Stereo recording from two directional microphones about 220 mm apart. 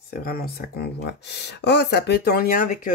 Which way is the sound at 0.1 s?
45° left (ahead or behind).